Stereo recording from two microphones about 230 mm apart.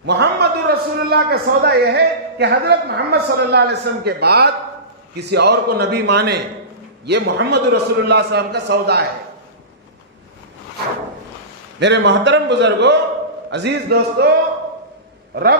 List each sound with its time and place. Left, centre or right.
0.0 s a man's voice: right
11.8 s a man's voice: right